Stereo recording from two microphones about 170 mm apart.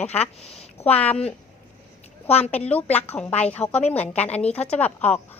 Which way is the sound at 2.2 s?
35° left (ahead or behind).